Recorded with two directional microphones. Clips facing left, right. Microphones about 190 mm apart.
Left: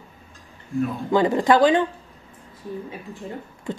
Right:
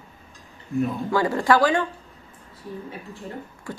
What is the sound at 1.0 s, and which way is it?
Speech, 20° left (ahead or behind).